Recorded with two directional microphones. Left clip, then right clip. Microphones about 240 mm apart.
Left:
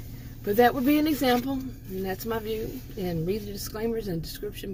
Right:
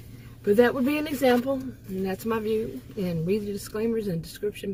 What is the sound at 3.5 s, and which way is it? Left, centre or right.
Speech, right.